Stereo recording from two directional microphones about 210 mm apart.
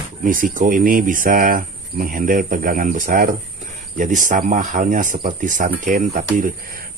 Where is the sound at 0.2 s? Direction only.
40° right (ahead or behind).